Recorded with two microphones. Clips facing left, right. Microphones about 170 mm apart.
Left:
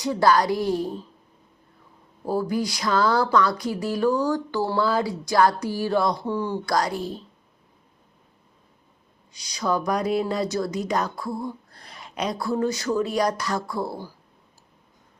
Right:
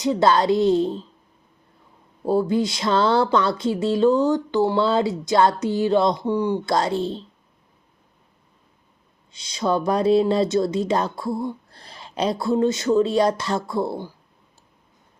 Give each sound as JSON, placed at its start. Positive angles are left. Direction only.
{"t": 0.0, "sound": "speech", "side_deg": -20}
{"t": 2.2, "sound": "speech", "side_deg": -25}
{"t": 9.3, "sound": "speech", "side_deg": -25}